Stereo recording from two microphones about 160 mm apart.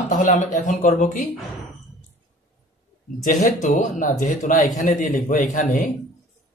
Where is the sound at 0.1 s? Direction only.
55° left (ahead or behind).